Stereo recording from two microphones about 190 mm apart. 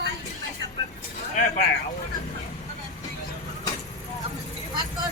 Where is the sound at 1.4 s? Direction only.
45° left (ahead or behind).